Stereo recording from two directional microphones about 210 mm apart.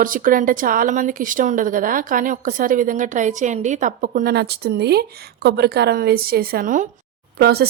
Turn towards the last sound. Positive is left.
turn(degrees=-50)  # may be behind; listen again after turning